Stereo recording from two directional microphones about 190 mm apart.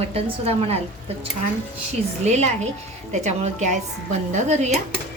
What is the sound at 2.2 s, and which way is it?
A woman's voice, 35° right (ahead or behind).